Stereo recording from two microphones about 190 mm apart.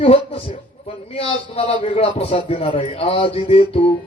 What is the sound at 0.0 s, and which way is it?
A man's voice, 30° left (ahead or behind).